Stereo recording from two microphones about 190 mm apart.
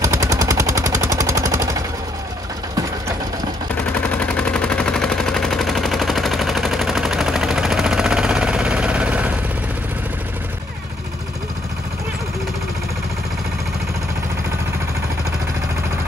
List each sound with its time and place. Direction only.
0.0 s machine gun: 20° right (ahead or behind)
3.9 s machine gun: 5° left (ahead or behind)